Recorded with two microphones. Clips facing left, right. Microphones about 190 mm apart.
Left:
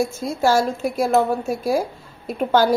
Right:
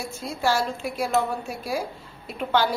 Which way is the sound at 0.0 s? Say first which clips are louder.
Left 7 dB; 45° left (ahead or behind).